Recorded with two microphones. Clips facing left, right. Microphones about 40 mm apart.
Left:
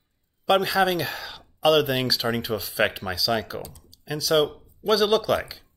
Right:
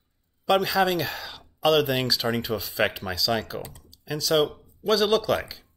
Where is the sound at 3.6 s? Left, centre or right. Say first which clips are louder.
Even; right.